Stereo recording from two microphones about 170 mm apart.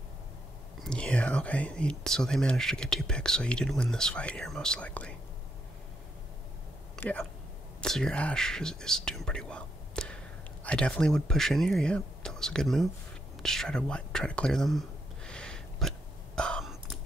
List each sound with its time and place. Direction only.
0.8 s speech: 5° left (ahead or behind)
7.0 s speech: 10° left (ahead or behind)
13.4 s whispering: centre (ahead or behind)
16.3 s a sound: 5° left (ahead or behind)